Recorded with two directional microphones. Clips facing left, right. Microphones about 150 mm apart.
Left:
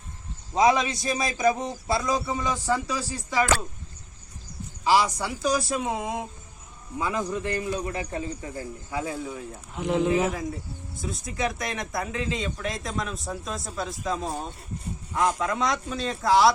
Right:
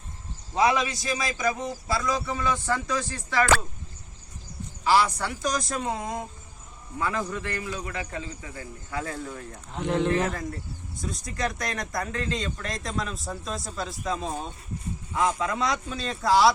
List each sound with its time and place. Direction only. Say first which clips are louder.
0.5 s a man's voice: left 2 dB; 20° left (ahead or behind)
4.8 s speech: even; 15° left (ahead or behind)
7.0 s speech: left 1 dB; 15° left (ahead or behind)
7.6 s speech: left 4 dB; 35° left (ahead or behind)
8.9 s speech: left 1 dB; 15° left (ahead or behind)